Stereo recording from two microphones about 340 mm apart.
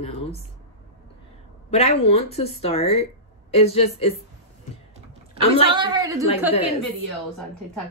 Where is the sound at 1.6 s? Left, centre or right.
Centre.